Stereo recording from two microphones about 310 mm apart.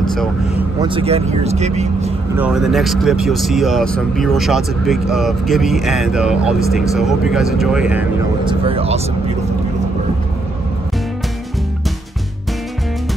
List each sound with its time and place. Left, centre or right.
0.0 s speech: centre
0.7 s speech: centre
2.3 s speech: centre
8.5 s speech: centre